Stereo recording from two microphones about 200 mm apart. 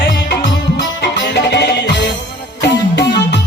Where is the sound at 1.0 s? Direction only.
60° left (ahead or behind).